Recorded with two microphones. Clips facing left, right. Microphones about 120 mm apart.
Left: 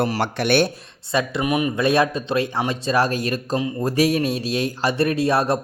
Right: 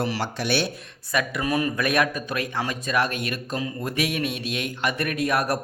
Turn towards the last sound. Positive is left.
turn(degrees=25)  # may be behind; listen again after turning